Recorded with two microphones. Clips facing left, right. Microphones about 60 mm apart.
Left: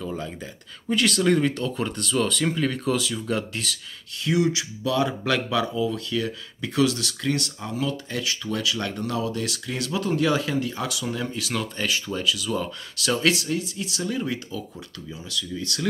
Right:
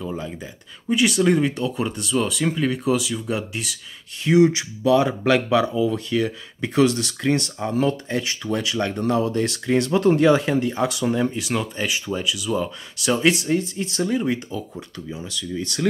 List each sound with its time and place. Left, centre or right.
0.0 s speech: centre
4.2 s speech: right
13.6 s speech: right
14.1 s speech: right